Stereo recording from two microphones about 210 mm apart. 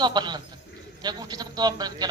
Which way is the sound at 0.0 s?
20° right (ahead or behind).